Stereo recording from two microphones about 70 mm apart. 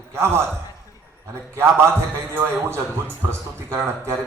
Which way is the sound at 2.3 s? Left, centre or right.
Right.